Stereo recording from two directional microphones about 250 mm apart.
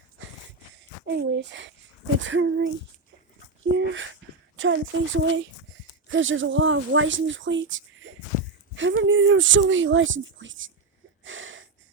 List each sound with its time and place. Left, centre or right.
1.0 s speech: right
3.8 s speech: right
11.2 s a sound: right